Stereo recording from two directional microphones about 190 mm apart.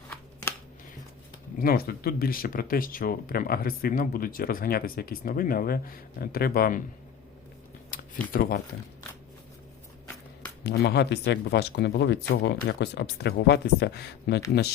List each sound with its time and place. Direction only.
1.5 s speech: 50° left (ahead or behind)
7.9 s a sound: 45° left (ahead or behind)
8.3 s speech: 50° left (ahead or behind)
10.6 s speech: 60° left (ahead or behind)